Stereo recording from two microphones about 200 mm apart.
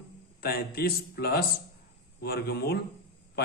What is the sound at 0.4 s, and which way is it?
A man's voice, 50° left (ahead or behind).